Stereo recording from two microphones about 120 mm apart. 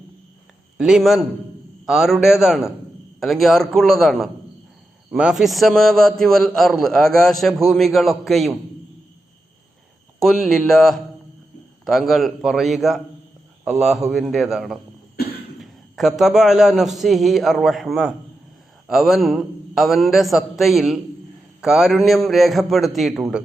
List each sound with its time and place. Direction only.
0.8 s a man's voice: 5° right (ahead or behind)
10.2 s a man's voice: centre (ahead or behind)